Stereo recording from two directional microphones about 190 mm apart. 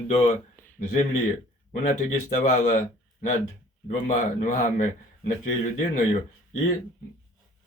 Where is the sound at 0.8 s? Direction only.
45° left (ahead or behind).